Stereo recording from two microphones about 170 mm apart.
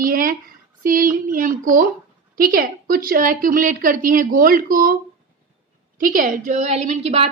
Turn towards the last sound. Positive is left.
turn(degrees=-40)  # may be behind; listen again after turning